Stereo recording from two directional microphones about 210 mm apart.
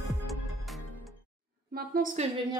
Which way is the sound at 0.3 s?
Centre (ahead or behind).